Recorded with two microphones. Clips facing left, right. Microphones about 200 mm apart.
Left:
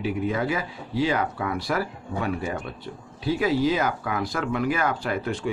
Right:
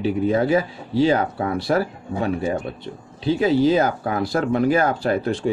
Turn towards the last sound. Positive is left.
turn(degrees=-35)  # may be behind; listen again after turning